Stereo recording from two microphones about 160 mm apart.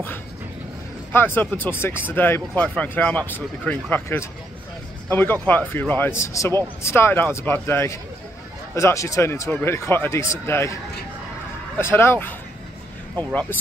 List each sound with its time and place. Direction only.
1.1 s speech: 15° left (ahead or behind)
11.8 s speech: 15° left (ahead or behind)